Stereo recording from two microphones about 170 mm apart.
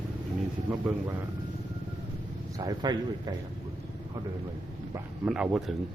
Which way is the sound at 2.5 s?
20° right (ahead or behind).